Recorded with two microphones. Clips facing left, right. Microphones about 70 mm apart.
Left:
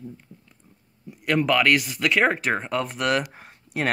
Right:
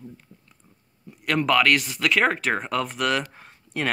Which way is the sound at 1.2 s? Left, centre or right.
Centre.